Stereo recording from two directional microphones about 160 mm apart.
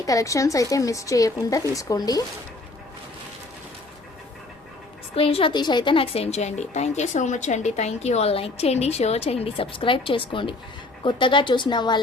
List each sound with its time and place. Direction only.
0.0 s speech: 20° left (ahead or behind)
5.1 s a woman's voice: 35° left (ahead or behind)